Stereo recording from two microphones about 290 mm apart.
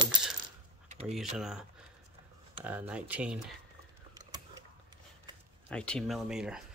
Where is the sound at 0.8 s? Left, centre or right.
Right.